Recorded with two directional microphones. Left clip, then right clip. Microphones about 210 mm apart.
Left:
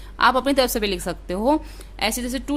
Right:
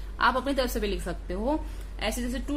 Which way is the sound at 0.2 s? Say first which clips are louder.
Left 7 dB; 45° left (ahead or behind).